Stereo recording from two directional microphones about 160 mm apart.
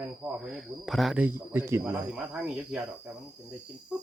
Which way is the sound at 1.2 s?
15° right (ahead or behind).